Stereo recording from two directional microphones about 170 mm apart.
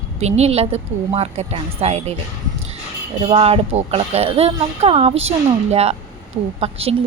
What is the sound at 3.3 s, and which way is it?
A woman's voice, 35° right (ahead or behind).